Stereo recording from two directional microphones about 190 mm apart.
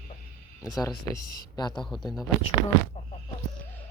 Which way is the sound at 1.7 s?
Centre (ahead or behind).